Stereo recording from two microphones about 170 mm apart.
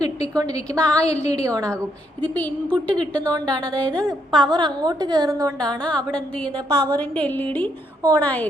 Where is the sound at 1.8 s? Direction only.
10° left (ahead or behind).